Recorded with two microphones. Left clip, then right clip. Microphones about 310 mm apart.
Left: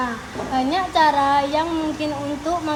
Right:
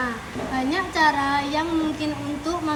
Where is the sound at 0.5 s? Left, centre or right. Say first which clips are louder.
Left 5 dB; left.